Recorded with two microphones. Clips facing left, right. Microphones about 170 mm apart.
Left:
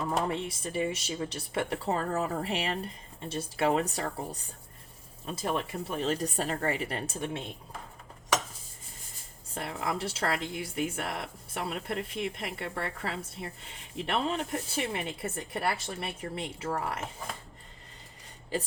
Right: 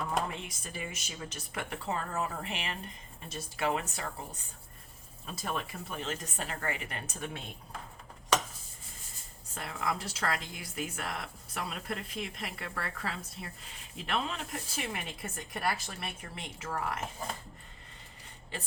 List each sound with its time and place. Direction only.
0.4 s speech: 30° left (ahead or behind)
9.6 s speech: 30° left (ahead or behind)